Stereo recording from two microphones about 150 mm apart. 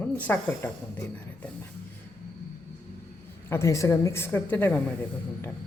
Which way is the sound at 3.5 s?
15° left (ahead or behind).